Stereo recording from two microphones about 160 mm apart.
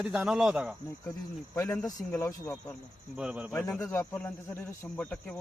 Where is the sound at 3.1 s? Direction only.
5° right (ahead or behind).